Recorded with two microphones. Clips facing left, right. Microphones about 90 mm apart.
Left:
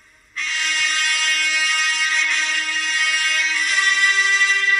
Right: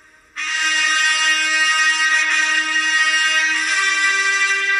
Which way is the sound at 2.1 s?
50° right (ahead or behind).